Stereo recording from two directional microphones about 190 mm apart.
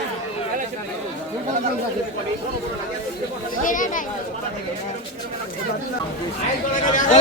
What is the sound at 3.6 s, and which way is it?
Speech, 45° left (ahead or behind).